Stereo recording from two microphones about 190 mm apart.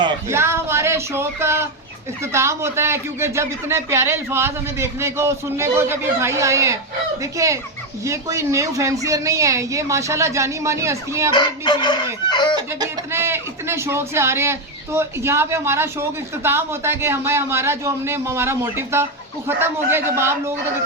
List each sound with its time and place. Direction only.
0.3 s a sound: 15° right (ahead or behind)
2.3 s speech: 15° right (ahead or behind)
11.3 s chicken: 25° left (ahead or behind)
12.5 s speech: 15° right (ahead or behind)